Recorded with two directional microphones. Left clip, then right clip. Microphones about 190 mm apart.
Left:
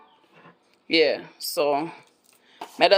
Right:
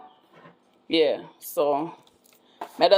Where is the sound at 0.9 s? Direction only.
Centre (ahead or behind).